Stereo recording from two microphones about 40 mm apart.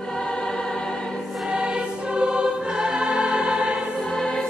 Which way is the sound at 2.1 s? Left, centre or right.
Right.